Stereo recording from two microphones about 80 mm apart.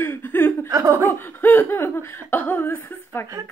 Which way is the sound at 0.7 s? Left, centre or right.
Right.